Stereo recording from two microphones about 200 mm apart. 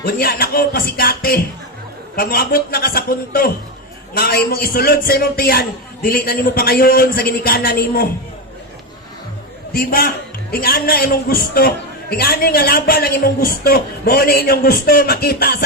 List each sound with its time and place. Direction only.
0.0 s a man's voice: 50° left (ahead or behind)
9.7 s a man's voice: 45° left (ahead or behind)